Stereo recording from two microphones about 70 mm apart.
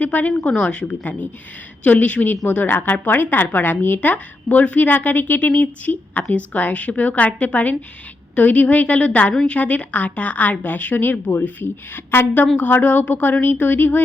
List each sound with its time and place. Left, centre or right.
0.0 s a woman's voice: left